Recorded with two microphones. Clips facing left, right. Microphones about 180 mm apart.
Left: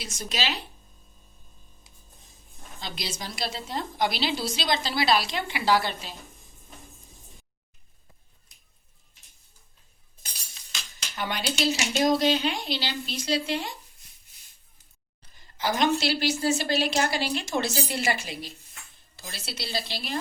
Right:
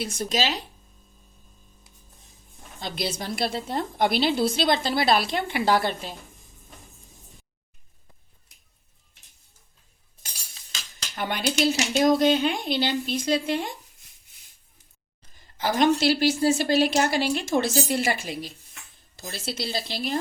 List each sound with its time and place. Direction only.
0.0 s a woman's voice: 55° right (ahead or behind)
2.8 s a woman's voice: 55° right (ahead or behind)
11.2 s a woman's voice: 50° right (ahead or behind)
15.5 s a woman's voice: 50° right (ahead or behind)